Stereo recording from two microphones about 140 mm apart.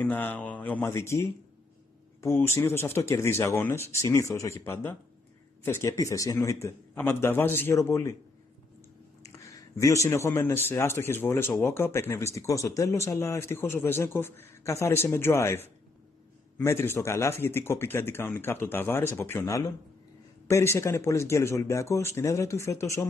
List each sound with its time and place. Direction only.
0.0 s speech: 15° left (ahead or behind)
9.2 s speech: 20° left (ahead or behind)